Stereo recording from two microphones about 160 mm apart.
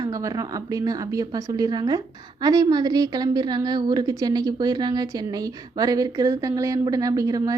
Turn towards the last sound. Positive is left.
turn(degrees=-20)  # may be behind; listen again after turning